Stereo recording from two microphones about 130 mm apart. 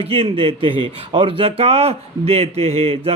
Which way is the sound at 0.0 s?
45° right (ahead or behind).